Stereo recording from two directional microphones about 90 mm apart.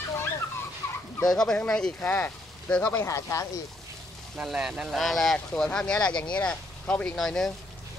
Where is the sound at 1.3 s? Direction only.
5° left (ahead or behind).